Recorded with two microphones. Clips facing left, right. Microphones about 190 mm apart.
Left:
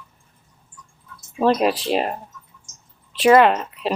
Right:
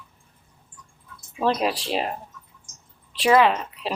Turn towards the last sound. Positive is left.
turn(degrees=0)  # may be behind; listen again after turning